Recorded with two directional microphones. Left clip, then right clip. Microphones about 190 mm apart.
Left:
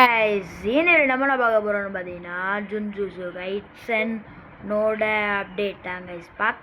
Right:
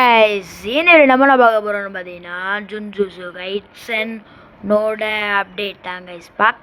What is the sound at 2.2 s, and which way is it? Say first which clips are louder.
Speech: right 5 dB; 65° right (ahead or behind).